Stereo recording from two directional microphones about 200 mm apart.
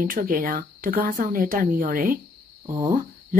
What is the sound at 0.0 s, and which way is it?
Speech, 45° right (ahead or behind).